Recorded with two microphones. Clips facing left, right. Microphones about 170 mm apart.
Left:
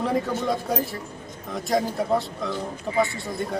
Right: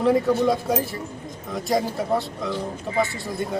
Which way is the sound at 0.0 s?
Centre (ahead or behind).